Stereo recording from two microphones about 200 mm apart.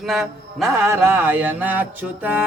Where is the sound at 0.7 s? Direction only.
10° right (ahead or behind).